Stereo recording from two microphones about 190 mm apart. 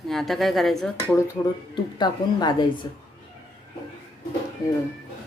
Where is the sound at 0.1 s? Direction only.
Centre (ahead or behind).